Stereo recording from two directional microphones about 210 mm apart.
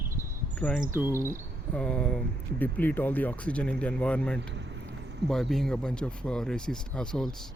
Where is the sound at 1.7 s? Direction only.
5° left (ahead or behind).